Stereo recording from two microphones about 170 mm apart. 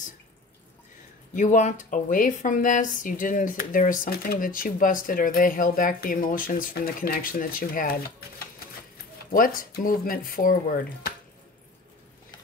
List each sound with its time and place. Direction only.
1.3 s speech: 45° left (ahead or behind)
9.3 s speech: 55° left (ahead or behind)